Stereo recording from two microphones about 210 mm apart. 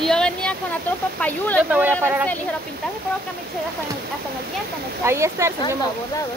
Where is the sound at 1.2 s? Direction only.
5° left (ahead or behind).